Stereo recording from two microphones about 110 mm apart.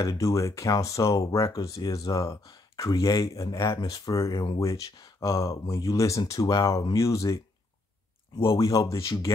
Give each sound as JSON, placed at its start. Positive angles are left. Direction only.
{"t": 0.0, "sound": "speech", "side_deg": 30}